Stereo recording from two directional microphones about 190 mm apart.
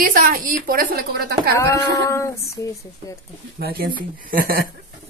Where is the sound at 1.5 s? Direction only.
15° left (ahead or behind).